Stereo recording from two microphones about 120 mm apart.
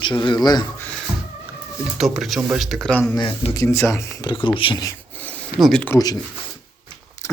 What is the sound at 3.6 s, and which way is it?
Speech, 20° left (ahead or behind).